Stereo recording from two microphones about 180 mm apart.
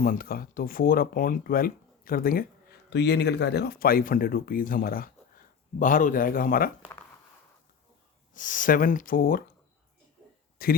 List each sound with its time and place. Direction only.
0.0 s speech: 50° left (ahead or behind)
2.9 s speech: 70° left (ahead or behind)
8.3 s speech: 45° left (ahead or behind)
10.6 s speech: 55° left (ahead or behind)